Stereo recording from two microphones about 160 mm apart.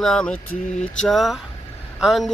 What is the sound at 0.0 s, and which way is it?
Speech, 5° left (ahead or behind).